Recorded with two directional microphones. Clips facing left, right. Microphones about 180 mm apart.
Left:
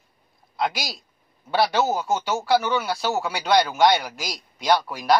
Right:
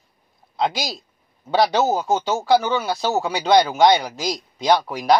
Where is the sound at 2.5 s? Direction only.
20° right (ahead or behind).